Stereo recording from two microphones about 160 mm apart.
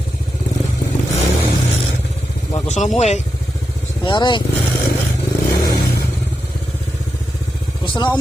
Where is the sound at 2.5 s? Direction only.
45° left (ahead or behind).